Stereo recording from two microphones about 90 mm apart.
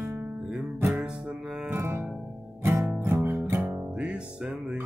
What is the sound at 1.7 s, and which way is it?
Music, 25° right (ahead or behind).